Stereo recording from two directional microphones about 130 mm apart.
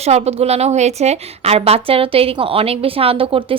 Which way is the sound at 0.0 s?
55° right (ahead or behind).